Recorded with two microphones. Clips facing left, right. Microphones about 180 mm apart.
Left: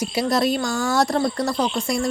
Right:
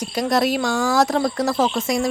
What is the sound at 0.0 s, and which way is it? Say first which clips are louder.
Speech: right 1 dB; 10° left (ahead or behind).